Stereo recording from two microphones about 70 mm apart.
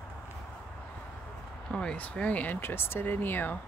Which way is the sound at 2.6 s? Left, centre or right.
Left.